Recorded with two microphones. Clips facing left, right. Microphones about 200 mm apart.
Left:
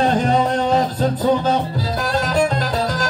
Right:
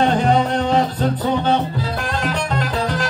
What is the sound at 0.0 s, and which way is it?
Music, 40° left (ahead or behind).